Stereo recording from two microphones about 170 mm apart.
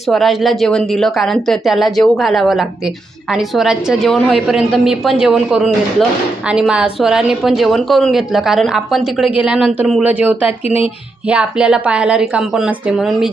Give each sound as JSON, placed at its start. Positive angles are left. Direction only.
{"t": 0.1, "sound": "a woman's voice", "side_deg": 0}